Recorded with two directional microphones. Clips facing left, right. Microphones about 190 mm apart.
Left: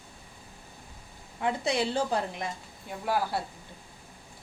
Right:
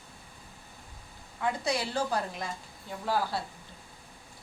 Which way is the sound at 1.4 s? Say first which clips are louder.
Left 2 dB; 25° left (ahead or behind).